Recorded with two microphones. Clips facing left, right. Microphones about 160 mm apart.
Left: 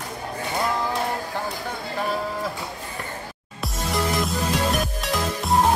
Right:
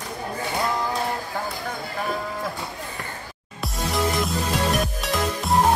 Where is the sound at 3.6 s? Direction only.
Centre (ahead or behind).